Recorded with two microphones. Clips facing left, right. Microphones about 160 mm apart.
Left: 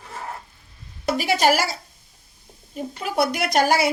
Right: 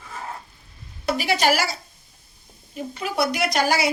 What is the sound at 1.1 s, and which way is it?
Speech, 45° left (ahead or behind).